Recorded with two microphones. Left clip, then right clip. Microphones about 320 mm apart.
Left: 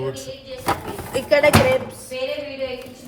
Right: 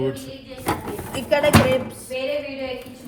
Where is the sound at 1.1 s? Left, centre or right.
Left.